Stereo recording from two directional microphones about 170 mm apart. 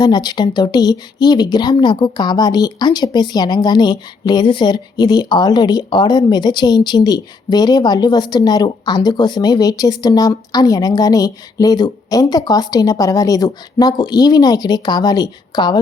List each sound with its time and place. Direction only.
0.0 s speech: 25° left (ahead or behind)